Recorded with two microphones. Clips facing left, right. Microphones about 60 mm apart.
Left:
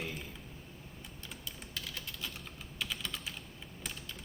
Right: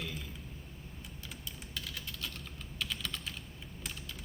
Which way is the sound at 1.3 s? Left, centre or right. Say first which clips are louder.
Left 1 dB; centre.